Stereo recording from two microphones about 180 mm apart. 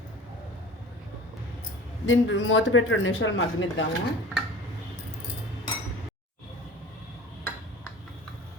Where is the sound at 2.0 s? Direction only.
90° left.